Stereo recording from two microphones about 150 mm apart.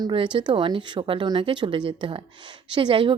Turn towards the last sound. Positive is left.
turn(degrees=-35)  # may be behind; listen again after turning